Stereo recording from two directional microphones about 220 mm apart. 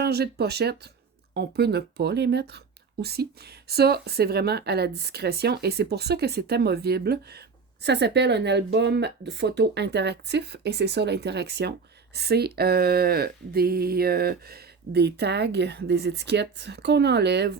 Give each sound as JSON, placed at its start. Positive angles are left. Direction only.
{"t": 0.0, "sound": "speech", "side_deg": -50}